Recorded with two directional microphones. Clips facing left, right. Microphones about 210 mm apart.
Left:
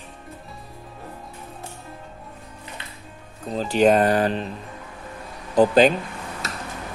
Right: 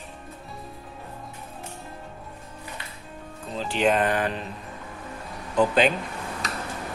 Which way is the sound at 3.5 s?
40° left (ahead or behind).